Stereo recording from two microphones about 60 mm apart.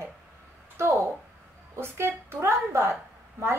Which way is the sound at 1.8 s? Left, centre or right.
Right.